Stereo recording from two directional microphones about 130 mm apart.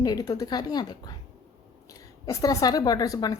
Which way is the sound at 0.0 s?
30° left (ahead or behind).